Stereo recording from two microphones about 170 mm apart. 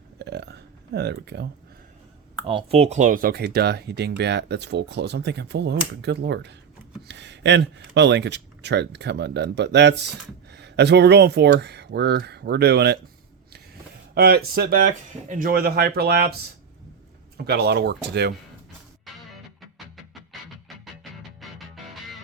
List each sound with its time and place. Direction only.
0.2 s burping: 80° right
2.5 s speech: 35° right (ahead or behind); by 13.0 s 75° right (ahead or behind)
14.2 s speech: 65° right (ahead or behind)
17.3 s speech: 70° right (ahead or behind)
20.3 s music: centre (ahead or behind)